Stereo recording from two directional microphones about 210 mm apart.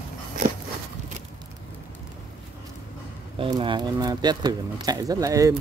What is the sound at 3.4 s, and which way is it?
Speech, 25° right (ahead or behind).